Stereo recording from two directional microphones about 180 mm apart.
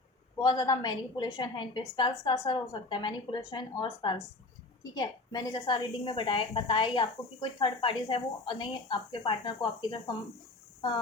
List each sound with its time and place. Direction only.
0.3 s a woman's voice: 20° left (ahead or behind)
10.8 s chicken: 25° left (ahead or behind)